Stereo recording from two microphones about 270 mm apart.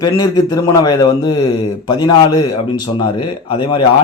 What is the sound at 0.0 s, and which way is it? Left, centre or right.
A man's voice, centre.